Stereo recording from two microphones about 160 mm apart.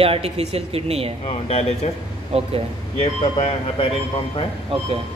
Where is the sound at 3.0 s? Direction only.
40° left (ahead or behind).